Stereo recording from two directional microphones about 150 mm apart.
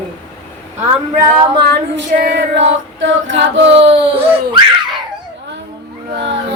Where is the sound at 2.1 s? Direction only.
65° right (ahead or behind).